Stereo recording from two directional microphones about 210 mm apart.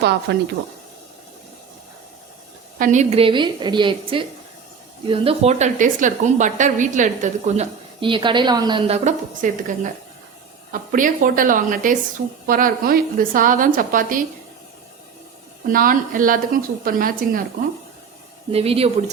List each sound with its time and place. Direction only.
0.0 s a woman's voice: 50° right (ahead or behind)
2.7 s a woman's voice: 35° right (ahead or behind); by 9.0 s 20° right (ahead or behind)
9.0 s speech: 40° right (ahead or behind)
15.7 s speech: 40° right (ahead or behind)
18.5 s a woman's voice: 30° right (ahead or behind)